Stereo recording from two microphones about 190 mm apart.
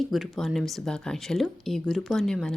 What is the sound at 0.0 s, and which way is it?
Speech, centre (ahead or behind).